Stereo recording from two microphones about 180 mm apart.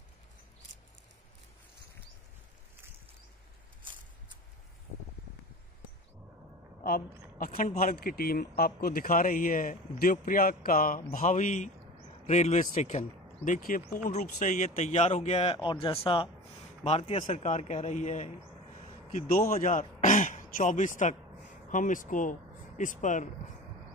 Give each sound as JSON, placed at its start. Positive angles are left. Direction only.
{"t": 7.3, "sound": "speech", "side_deg": 50}
{"t": 19.1, "sound": "a man's voice", "side_deg": 55}